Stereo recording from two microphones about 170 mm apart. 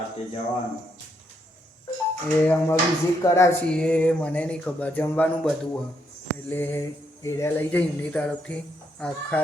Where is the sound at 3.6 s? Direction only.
5° left (ahead or behind).